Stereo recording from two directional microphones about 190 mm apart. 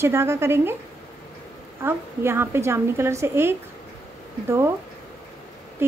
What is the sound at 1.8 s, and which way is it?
A woman's voice, 10° right (ahead or behind).